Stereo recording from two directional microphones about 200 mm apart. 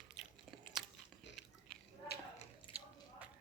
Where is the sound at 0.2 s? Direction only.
Centre (ahead or behind).